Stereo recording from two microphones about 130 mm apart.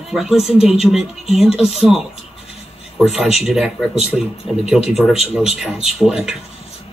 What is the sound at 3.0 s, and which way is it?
Speech, 5° right (ahead or behind).